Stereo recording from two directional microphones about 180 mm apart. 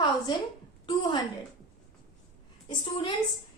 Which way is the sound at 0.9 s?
25° left (ahead or behind).